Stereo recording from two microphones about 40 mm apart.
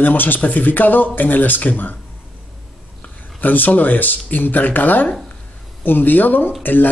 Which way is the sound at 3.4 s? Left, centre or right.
Left.